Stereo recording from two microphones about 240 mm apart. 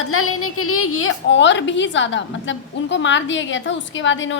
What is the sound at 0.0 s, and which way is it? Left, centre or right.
A woman's voice, left.